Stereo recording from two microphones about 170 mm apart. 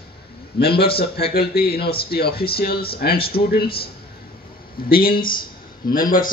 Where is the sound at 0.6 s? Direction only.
70° left (ahead or behind).